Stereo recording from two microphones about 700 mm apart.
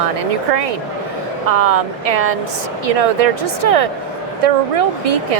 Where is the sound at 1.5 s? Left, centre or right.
Right.